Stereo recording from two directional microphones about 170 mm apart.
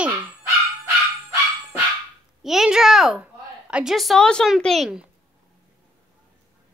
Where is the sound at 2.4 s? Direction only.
Centre (ahead or behind).